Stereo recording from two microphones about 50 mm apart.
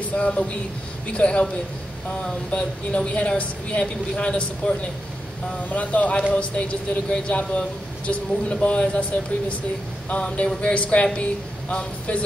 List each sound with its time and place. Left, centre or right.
0.1 s speech: left
2.5 s speech: left